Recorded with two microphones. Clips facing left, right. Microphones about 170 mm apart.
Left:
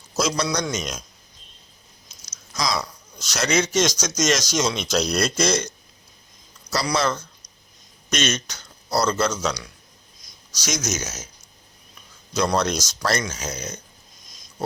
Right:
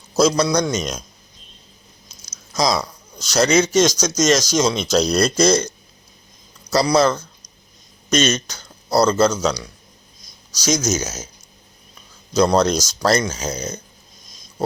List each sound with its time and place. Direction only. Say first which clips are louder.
0.2 s speech: right 7 dB; 40° right (ahead or behind)
2.6 s speech: right 6 dB; 35° right (ahead or behind)
6.8 s speech: right 6 dB; 35° right (ahead or behind)
12.3 s speech: right 6 dB; 35° right (ahead or behind)